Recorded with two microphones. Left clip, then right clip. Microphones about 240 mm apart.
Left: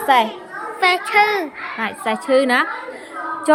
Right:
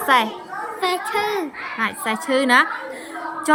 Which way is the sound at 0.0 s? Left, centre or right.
Centre.